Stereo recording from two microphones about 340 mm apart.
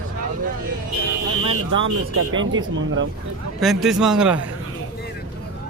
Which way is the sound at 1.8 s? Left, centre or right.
Right.